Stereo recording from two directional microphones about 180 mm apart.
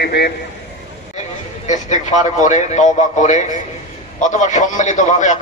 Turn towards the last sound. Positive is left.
turn(degrees=45)  # may be behind; listen again after turning